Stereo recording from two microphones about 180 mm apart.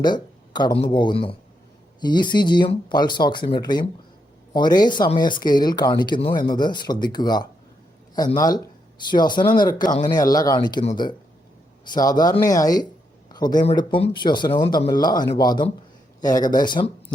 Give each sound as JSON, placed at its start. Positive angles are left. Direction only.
{"t": 0.0, "sound": "speech", "side_deg": 25}
{"t": 11.9, "sound": "speech", "side_deg": 20}